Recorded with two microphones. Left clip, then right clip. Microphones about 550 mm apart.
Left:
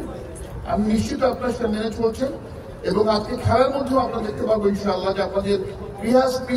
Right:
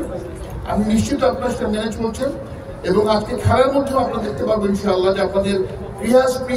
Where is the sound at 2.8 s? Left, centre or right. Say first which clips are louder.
Right 3 dB; left.